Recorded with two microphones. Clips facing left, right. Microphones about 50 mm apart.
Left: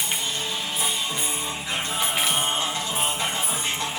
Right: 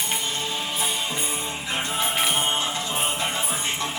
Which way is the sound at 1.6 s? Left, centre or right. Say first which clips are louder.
Right 2 dB; right.